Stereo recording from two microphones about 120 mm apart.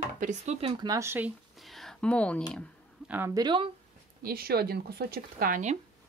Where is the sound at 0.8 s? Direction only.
25° right (ahead or behind).